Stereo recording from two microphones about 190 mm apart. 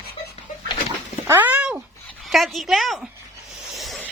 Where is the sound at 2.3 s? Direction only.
Centre (ahead or behind).